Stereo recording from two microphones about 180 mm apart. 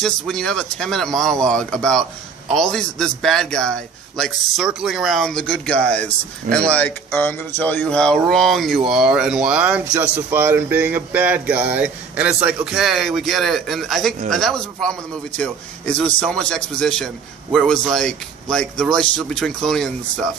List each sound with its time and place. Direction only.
0.0 s speech: 5° left (ahead or behind)